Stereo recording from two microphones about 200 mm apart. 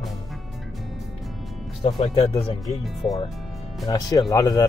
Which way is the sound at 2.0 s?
25° left (ahead or behind).